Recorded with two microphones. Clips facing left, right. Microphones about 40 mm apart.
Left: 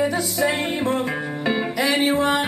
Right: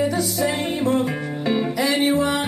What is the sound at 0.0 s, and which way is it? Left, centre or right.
Music, centre.